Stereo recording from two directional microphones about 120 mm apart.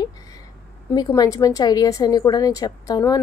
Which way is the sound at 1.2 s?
30° left (ahead or behind).